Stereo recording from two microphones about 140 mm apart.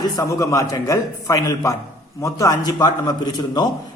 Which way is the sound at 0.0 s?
25° left (ahead or behind).